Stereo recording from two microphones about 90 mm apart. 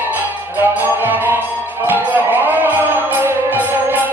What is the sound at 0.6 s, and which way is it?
Music, 20° right (ahead or behind).